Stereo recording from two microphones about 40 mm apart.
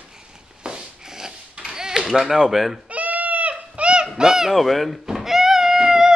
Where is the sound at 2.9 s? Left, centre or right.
Right.